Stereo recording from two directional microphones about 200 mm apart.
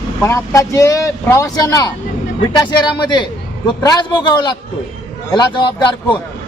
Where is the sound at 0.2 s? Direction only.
15° left (ahead or behind).